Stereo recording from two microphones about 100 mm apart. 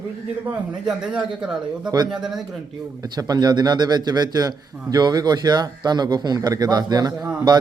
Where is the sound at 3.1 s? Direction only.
40° right (ahead or behind).